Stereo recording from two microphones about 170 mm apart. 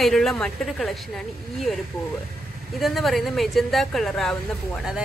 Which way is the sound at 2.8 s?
Centre (ahead or behind).